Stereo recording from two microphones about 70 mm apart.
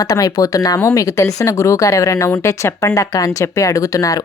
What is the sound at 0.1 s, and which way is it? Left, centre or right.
A woman's voice, left.